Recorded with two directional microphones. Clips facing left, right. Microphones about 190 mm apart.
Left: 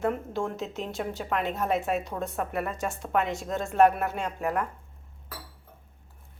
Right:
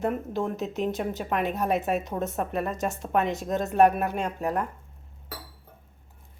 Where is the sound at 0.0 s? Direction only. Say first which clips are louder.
Right 1 dB; 20° right (ahead or behind).